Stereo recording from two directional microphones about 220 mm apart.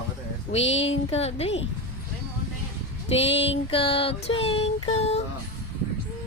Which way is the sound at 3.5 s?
25° left (ahead or behind).